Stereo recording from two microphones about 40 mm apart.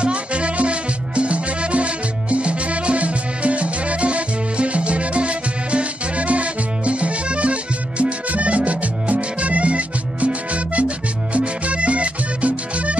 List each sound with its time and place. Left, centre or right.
0.0 s music: right